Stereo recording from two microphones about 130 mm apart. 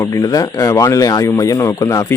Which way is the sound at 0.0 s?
25° left (ahead or behind).